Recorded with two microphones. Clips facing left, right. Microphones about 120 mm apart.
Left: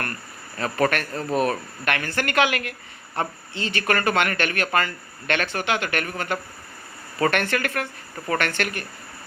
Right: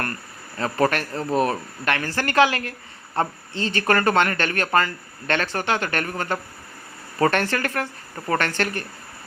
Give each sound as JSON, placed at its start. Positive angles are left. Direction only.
{"t": 0.5, "sound": "speech", "side_deg": -30}